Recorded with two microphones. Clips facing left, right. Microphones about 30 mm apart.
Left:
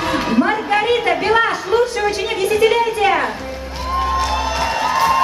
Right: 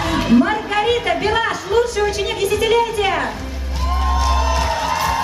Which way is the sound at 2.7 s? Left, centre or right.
Centre.